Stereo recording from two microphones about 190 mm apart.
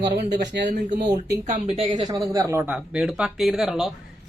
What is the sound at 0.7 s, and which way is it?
Speech, 50° right (ahead or behind).